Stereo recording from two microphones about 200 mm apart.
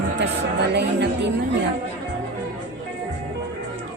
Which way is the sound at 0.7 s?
60° right (ahead or behind).